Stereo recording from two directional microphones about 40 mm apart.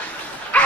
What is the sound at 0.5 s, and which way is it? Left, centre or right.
Dog, left.